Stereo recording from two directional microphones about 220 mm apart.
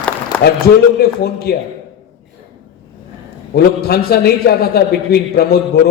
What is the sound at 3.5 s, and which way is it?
A man's voice, 45° left (ahead or behind).